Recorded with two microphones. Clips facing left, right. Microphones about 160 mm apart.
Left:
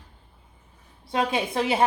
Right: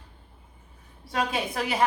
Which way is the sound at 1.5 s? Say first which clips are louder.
Left 3 dB; 25° left (ahead or behind).